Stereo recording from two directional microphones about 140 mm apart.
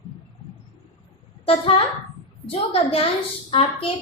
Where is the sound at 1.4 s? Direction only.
45° left (ahead or behind).